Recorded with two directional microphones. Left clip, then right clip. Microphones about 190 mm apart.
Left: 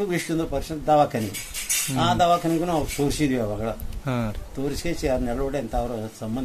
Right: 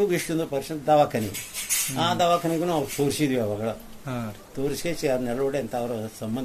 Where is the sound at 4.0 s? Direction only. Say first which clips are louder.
Left 9 dB; 60° left (ahead or behind).